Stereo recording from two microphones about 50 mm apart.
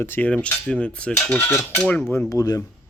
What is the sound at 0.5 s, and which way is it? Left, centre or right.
Speech, centre.